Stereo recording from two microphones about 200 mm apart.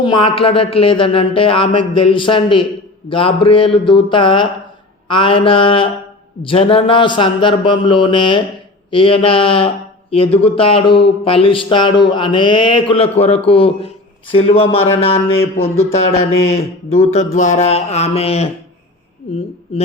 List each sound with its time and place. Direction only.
0.0 s speech: 25° left (ahead or behind)
16.5 s mantra: 30° left (ahead or behind)